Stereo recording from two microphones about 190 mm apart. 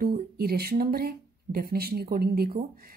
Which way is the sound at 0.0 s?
55° right (ahead or behind).